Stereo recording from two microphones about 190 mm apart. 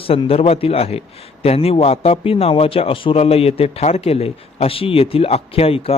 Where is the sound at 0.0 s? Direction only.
30° left (ahead or behind).